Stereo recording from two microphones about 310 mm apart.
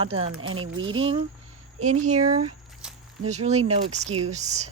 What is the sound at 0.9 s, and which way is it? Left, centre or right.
Speech, centre.